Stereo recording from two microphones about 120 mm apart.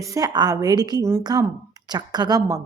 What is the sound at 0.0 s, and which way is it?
A woman's voice, 30° right (ahead or behind).